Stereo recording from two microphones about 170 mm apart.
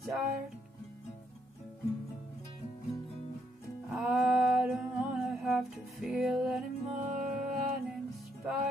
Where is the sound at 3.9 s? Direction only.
5° right (ahead or behind).